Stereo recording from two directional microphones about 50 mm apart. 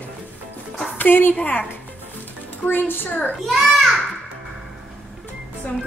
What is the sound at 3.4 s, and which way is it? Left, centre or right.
Speech, centre.